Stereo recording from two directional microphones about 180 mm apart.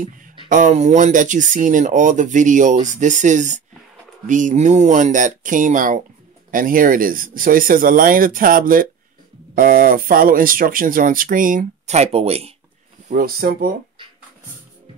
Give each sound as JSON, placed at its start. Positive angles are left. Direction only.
{"t": 0.5, "sound": "speech", "side_deg": -45}
{"t": 13.1, "sound": "speech", "side_deg": -55}